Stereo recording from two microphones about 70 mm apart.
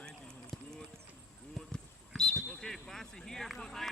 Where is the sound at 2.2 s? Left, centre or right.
Centre.